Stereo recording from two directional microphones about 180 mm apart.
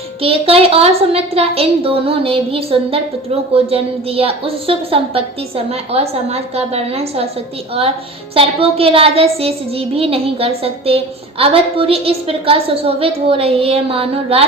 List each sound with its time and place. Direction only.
0.2 s a woman's voice: 30° right (ahead or behind)
8.4 s a woman's voice: 30° right (ahead or behind)